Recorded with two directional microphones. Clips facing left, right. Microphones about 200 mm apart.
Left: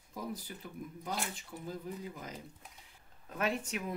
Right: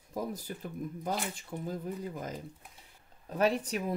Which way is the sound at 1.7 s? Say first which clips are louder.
Right 3 dB; 45° right (ahead or behind).